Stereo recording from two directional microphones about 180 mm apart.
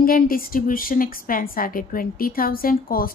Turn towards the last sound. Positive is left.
turn(degrees=55)  # may be behind; listen again after turning